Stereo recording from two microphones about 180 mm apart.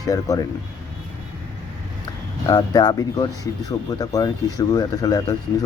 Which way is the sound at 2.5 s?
25° left (ahead or behind).